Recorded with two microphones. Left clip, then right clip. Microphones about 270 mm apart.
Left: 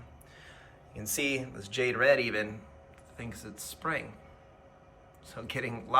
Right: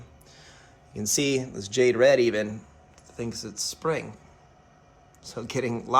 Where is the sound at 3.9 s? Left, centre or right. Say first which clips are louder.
Right 5 dB; right.